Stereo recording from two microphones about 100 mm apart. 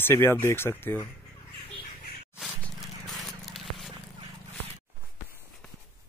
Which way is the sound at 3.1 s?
Centre (ahead or behind).